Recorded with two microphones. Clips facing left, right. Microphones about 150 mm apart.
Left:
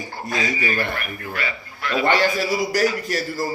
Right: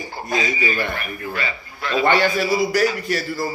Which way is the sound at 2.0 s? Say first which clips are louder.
Right 2 dB; 35° left (ahead or behind).